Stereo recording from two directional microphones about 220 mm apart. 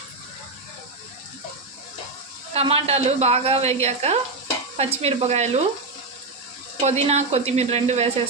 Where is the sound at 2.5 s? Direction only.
25° right (ahead or behind).